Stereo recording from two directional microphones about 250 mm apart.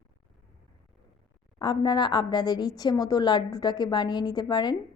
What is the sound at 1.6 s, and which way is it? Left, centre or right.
A woman's voice, centre.